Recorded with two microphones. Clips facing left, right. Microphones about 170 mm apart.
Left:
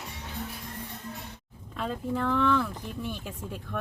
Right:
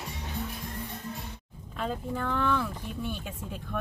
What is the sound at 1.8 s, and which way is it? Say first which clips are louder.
Speech: left 2 dB; centre (ahead or behind).